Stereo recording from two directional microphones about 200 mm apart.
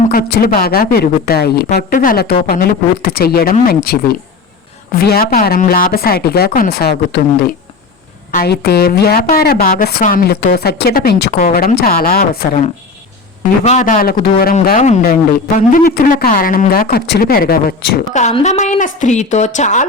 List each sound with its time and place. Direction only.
0.1 s a woman's voice: 45° left (ahead or behind)
18.1 s a woman's voice: 35° left (ahead or behind)